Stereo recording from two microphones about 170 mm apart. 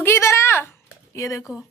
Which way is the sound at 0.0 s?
15° left (ahead or behind).